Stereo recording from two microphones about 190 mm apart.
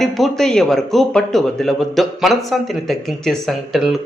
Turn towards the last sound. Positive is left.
turn(degrees=0)  # may be behind; listen again after turning